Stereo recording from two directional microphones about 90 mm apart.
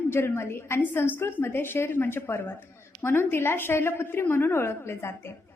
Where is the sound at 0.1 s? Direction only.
30° left (ahead or behind).